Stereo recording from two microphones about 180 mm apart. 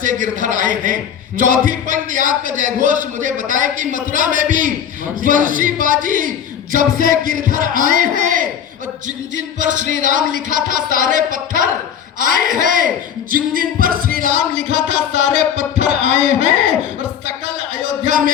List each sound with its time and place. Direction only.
0.0 s music: 45° right (ahead or behind)
9.6 s music: 45° right (ahead or behind)